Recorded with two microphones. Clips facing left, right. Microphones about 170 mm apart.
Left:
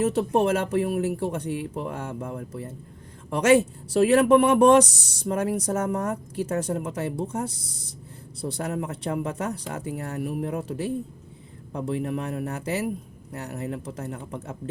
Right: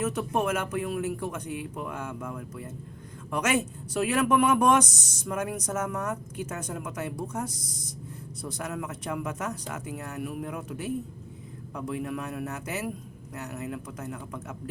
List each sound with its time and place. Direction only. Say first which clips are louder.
0.0 s speech: left 6 dB; 30° left (ahead or behind)